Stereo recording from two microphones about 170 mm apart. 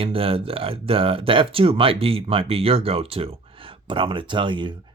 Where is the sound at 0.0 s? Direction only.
35° right (ahead or behind).